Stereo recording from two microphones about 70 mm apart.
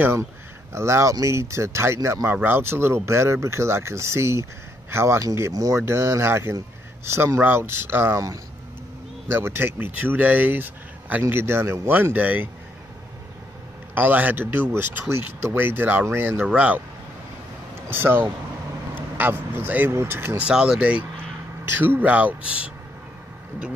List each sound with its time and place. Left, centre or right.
0.0 s speech: right
5.5 s speech: right
9.3 s speech: right
11.9 s speech: right
13.9 s speech: right
14.7 s speech: right
16.4 s speech: centre
17.8 s speech: right
20.3 s speech: centre
21.7 s speech: right